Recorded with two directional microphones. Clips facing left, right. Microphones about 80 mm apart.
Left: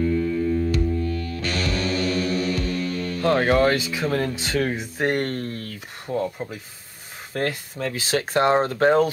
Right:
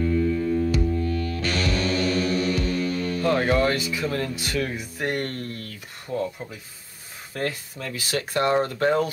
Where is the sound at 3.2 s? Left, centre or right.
Left.